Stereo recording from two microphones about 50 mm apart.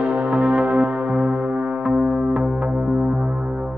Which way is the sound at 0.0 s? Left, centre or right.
Right.